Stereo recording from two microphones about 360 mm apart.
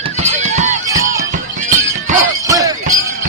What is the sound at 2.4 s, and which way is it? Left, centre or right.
Music, centre.